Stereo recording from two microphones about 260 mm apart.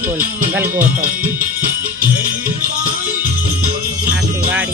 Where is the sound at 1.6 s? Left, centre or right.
Right.